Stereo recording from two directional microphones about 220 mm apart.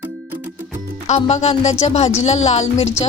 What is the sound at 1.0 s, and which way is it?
Speech, 30° left (ahead or behind).